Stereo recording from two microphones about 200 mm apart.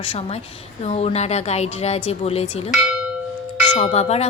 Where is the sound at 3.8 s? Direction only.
30° left (ahead or behind).